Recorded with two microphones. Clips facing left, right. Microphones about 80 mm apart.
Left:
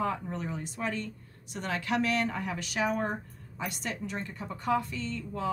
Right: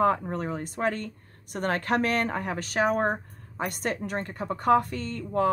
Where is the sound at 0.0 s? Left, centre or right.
Right.